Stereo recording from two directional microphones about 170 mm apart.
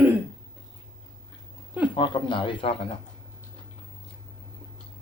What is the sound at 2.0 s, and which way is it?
Speech, 30° left (ahead or behind).